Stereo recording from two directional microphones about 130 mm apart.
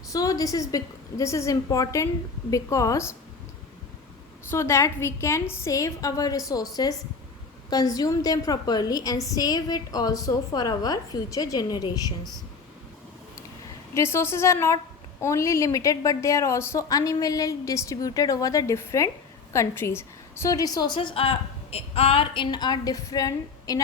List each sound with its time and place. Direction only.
0.1 s a woman's voice: 25° left (ahead or behind)
4.5 s a woman's voice: 20° left (ahead or behind)
13.9 s a woman's voice: 20° left (ahead or behind)